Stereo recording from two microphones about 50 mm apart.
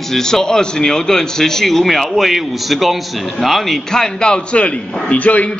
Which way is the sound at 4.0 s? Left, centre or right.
Centre.